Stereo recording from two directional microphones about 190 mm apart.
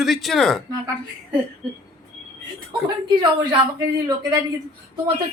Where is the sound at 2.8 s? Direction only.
25° right (ahead or behind).